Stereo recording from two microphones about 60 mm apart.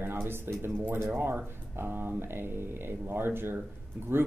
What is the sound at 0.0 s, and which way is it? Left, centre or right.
Speech, right.